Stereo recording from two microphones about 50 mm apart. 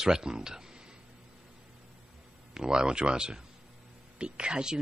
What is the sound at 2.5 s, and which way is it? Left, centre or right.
Speech, centre.